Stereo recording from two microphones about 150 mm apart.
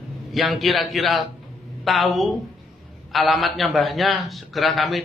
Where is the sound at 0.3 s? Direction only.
Centre (ahead or behind).